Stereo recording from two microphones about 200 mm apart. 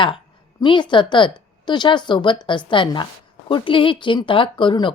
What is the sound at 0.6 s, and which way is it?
A woman's voice, 25° left (ahead or behind).